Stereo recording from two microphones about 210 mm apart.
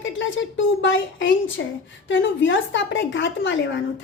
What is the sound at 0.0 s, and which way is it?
A woman's voice, 65° left (ahead or behind).